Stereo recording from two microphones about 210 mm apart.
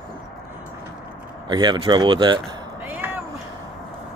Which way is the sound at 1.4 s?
20° right (ahead or behind).